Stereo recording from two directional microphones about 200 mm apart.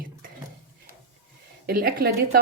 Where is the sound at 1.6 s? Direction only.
45° right (ahead or behind).